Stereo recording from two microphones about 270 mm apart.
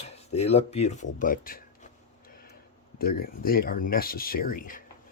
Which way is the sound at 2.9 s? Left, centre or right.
Left.